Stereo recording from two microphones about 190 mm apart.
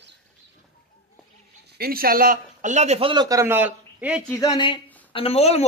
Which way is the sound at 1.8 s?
50° right (ahead or behind).